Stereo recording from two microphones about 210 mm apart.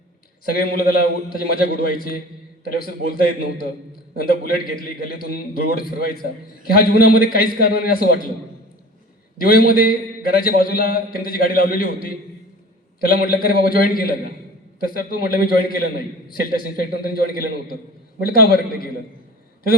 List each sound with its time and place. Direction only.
0.4 s a man's voice: 45° left (ahead or behind)
9.4 s a man's voice: 45° left (ahead or behind)